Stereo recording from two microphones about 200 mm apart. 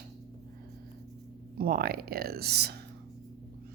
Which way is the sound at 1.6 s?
50° right (ahead or behind).